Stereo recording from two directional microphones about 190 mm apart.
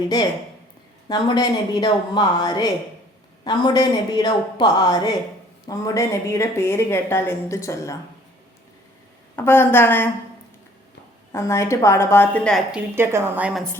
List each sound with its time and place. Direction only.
1.0 s a woman's voice: 25° left (ahead or behind)
9.3 s a woman's voice: 10° left (ahead or behind)
11.3 s a woman's voice: 15° left (ahead or behind)
13.0 s a woman's voice: 15° right (ahead or behind)